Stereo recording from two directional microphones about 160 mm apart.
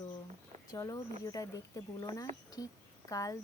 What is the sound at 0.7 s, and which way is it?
Speech, 25° left (ahead or behind).